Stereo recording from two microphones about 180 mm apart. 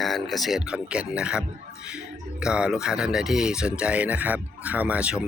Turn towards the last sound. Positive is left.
turn(degrees=-5)  # may be behind; listen again after turning